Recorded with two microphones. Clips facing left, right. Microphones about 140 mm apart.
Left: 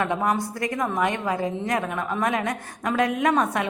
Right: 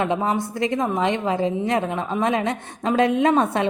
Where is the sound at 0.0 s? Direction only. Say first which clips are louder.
Right 2 dB; 20° right (ahead or behind).